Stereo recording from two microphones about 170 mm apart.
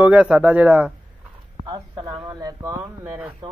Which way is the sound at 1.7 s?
25° right (ahead or behind).